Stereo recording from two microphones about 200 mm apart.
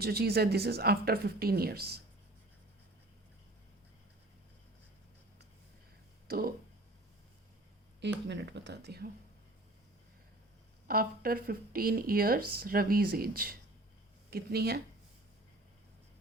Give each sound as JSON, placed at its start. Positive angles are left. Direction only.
{"t": 0.0, "sound": "speech", "side_deg": -50}
{"t": 6.2, "sound": "speech", "side_deg": -50}
{"t": 8.0, "sound": "speech", "side_deg": -60}
{"t": 10.8, "sound": "speech", "side_deg": -45}